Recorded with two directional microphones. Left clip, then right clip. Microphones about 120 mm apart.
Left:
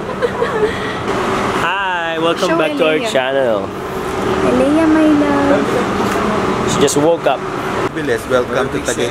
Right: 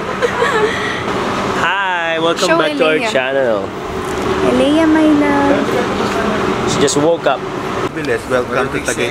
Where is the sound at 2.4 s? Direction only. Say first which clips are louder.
Right 2 dB; 5° right (ahead or behind).